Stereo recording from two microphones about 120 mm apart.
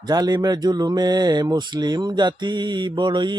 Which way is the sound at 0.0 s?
35° right (ahead or behind).